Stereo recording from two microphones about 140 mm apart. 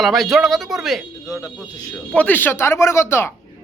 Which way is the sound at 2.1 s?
10° left (ahead or behind).